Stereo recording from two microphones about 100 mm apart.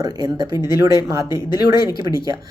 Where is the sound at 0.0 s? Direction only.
40° right (ahead or behind).